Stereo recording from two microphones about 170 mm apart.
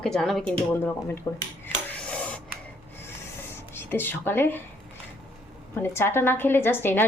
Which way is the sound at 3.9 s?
10° left (ahead or behind).